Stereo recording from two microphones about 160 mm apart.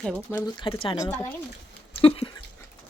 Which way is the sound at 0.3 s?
30° left (ahead or behind).